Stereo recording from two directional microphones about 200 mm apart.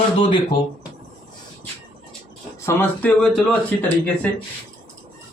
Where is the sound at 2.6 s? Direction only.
10° left (ahead or behind).